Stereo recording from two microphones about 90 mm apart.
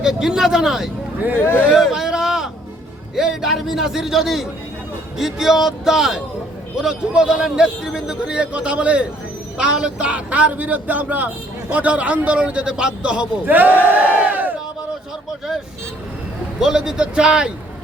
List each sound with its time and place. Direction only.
0.0 s a man's voice: 5° right (ahead or behind)
1.4 s speech: 25° left (ahead or behind)
1.7 s a sound: 5° right (ahead or behind)
3.2 s a man's voice: 5° right (ahead or behind); by 13.7 s 20° right (ahead or behind)
13.8 s crowd: 20° right (ahead or behind)
16.6 s a man's voice: 5° right (ahead or behind)